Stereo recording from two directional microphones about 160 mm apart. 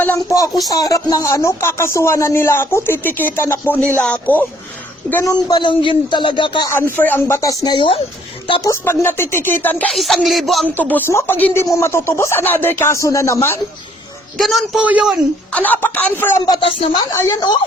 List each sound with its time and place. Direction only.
0.0 s speech: 15° left (ahead or behind)
5.1 s speech: 20° left (ahead or behind)
6.9 s speech: 10° left (ahead or behind); by 8.7 s 30° left (ahead or behind)
8.7 s speech: 15° left (ahead or behind)
14.3 s a man's voice: centre (ahead or behind)
15.5 s speech: 10° left (ahead or behind)
16.6 s speech: 30° left (ahead or behind)